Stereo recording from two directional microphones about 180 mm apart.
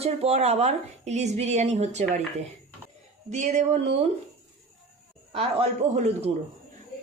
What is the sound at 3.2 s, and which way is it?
Speech, 40° right (ahead or behind).